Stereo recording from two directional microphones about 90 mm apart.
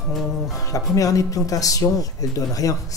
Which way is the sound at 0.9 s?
40° left (ahead or behind).